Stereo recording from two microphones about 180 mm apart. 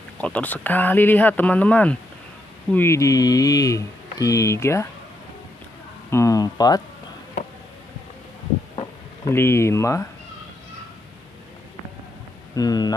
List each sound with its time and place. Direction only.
0.2 s speech: 10° left (ahead or behind)
6.0 s speech: 15° left (ahead or behind)
8.7 s a sound: 15° left (ahead or behind)
12.5 s speech: 20° left (ahead or behind)